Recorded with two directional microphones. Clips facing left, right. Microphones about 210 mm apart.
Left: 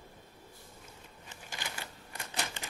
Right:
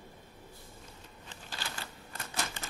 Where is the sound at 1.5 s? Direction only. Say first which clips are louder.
Even; 15° left (ahead or behind).